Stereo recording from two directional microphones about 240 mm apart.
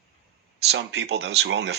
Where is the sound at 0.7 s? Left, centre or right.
Right.